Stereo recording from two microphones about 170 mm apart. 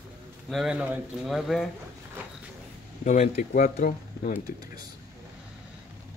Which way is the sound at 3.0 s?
45° left (ahead or behind).